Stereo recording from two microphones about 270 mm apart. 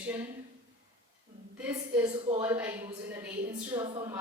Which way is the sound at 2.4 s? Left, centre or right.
Centre.